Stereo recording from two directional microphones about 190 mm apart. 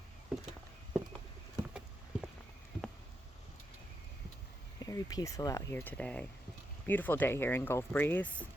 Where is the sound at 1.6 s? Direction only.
5° right (ahead or behind).